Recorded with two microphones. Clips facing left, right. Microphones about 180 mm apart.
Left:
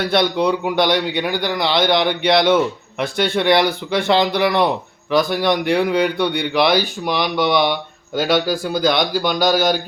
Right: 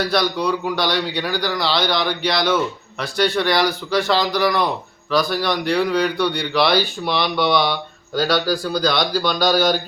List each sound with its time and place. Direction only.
0.1 s a man's voice: 25° left (ahead or behind)